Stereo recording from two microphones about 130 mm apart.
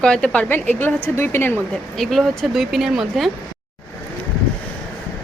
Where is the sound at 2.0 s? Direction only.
Centre (ahead or behind).